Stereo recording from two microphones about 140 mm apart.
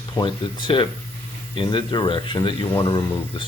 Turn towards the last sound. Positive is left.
turn(degrees=35)  # may be behind; listen again after turning